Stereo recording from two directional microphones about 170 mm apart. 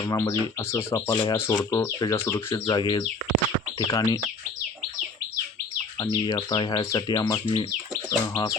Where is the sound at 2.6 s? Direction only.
25° left (ahead or behind).